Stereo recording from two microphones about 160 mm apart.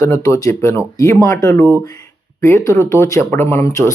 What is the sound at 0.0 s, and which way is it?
Speech, 20° left (ahead or behind).